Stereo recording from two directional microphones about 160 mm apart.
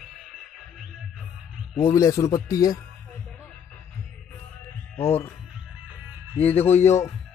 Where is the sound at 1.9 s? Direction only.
20° left (ahead or behind).